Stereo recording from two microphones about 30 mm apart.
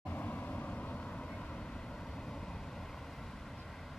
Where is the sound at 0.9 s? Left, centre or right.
Left.